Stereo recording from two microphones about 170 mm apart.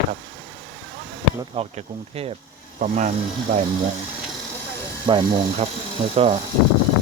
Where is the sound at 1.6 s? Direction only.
35° right (ahead or behind).